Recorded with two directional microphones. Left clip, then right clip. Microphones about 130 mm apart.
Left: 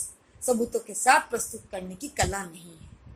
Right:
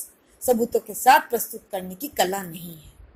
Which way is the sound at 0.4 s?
30° right (ahead or behind).